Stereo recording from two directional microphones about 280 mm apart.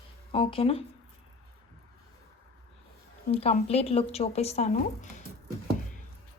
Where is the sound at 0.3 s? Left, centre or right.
Centre.